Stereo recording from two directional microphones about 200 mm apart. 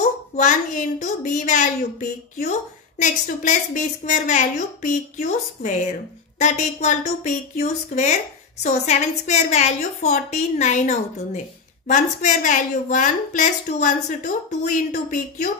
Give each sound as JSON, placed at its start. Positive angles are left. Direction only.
{"t": 0.4, "sound": "a woman's voice", "side_deg": 40}